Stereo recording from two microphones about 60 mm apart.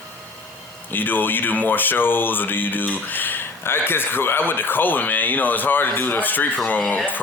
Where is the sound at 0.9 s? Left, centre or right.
Left.